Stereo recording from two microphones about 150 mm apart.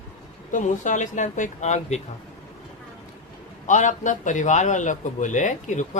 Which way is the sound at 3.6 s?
55° left (ahead or behind).